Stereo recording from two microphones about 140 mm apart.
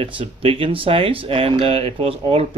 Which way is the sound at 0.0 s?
40° right (ahead or behind).